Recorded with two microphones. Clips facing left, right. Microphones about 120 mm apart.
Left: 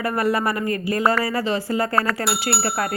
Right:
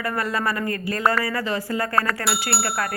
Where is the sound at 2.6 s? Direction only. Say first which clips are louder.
Left 2 dB; 30° left (ahead or behind).